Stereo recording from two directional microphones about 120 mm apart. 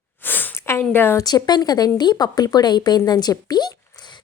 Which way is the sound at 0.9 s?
20° left (ahead or behind).